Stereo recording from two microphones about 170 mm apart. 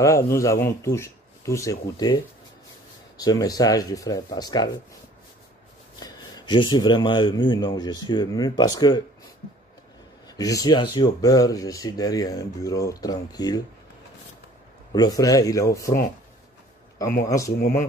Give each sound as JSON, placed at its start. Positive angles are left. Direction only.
{"t": 0.0, "sound": "speech", "side_deg": 20}
{"t": 5.9, "sound": "speech", "side_deg": 25}
{"t": 10.2, "sound": "speech", "side_deg": 20}
{"t": 14.9, "sound": "speech", "side_deg": 25}
{"t": 17.2, "sound": "speech", "side_deg": 20}
{"t": 17.5, "sound": "speech", "side_deg": 60}